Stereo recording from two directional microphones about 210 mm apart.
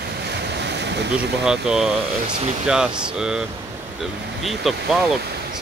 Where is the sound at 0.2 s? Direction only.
55° right (ahead or behind).